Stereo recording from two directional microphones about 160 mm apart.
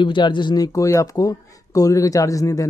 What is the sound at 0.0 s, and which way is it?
Speech, 30° left (ahead or behind).